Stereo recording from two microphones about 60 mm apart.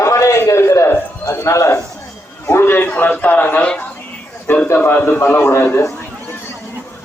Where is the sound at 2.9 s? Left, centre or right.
Left.